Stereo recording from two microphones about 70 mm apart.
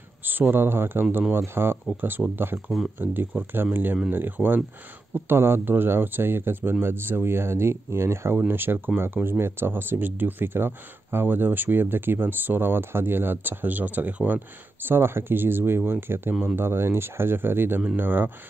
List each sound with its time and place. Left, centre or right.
0.2 s speech: right